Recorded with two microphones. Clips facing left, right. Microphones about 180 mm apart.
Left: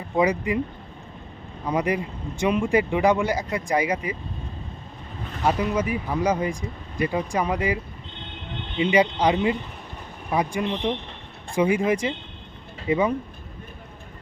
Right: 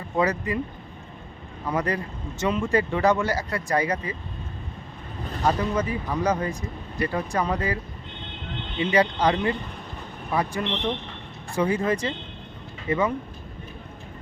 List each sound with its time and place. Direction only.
0.2 s speech: 15° left (ahead or behind)
1.6 s speech: 15° left (ahead or behind)
5.5 s speech: 10° left (ahead or behind)
8.8 s speech: 15° left (ahead or behind)